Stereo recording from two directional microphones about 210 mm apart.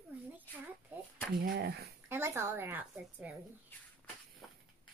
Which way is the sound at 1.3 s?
45° right (ahead or behind).